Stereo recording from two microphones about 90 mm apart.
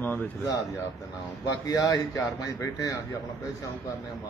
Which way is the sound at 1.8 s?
40° left (ahead or behind).